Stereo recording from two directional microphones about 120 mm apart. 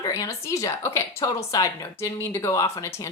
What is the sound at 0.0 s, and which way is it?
A woman's voice, 25° left (ahead or behind).